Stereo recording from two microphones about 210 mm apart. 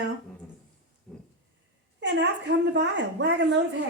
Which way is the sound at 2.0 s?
55° right (ahead or behind).